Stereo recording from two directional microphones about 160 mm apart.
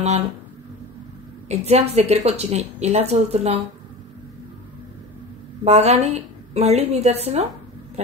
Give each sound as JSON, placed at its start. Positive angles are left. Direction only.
{"t": 1.5, "sound": "a woman's voice", "side_deg": -40}
{"t": 5.6, "sound": "a woman's voice", "side_deg": -40}